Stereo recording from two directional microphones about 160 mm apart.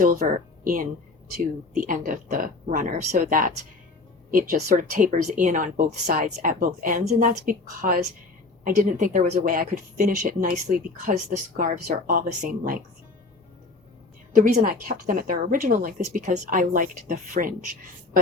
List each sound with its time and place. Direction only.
0.0 s speech: 60° right (ahead or behind)
14.6 s speech: 65° right (ahead or behind)